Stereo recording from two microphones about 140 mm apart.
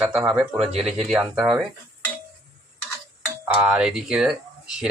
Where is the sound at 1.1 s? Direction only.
5° right (ahead or behind).